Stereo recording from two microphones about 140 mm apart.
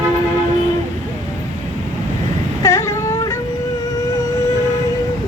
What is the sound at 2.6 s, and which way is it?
Humming, 20° left (ahead or behind).